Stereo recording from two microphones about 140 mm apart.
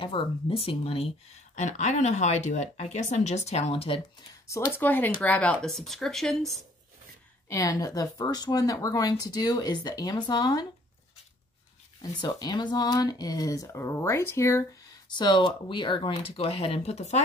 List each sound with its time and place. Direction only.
0.0 s speech: 40° left (ahead or behind)
1.5 s speech: 55° left (ahead or behind)
4.5 s speech: 20° left (ahead or behind); by 6.6 s centre (ahead or behind)
7.4 s speech: 25° left (ahead or behind)
12.0 s speech: 30° left (ahead or behind)
15.0 s speech: 30° left (ahead or behind); by 17.2 s 50° left (ahead or behind)